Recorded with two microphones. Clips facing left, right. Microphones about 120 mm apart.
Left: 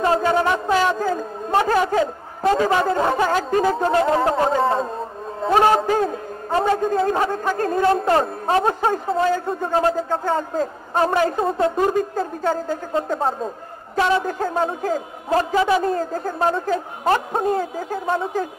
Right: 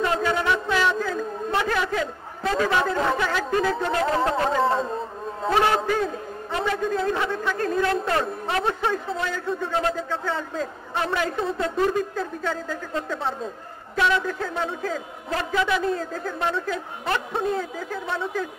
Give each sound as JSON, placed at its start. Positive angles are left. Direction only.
{"t": 0.0, "sound": "a woman's voice", "side_deg": 35}